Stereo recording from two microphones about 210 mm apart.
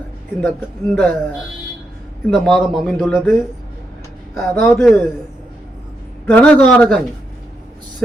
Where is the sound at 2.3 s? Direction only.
Centre (ahead or behind).